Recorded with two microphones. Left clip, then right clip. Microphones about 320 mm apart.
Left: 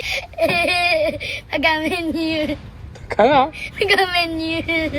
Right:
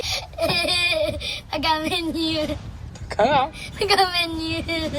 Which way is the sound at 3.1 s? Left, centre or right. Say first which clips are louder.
Left 5 dB; centre.